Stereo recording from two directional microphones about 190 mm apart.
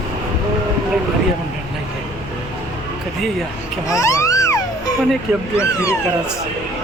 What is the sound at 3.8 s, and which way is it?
Music, 15° left (ahead or behind).